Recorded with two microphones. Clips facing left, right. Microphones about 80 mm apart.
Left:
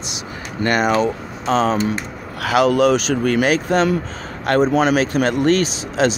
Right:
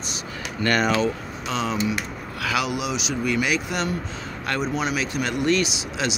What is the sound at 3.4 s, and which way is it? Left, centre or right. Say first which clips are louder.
Speech: left 8 dB; left.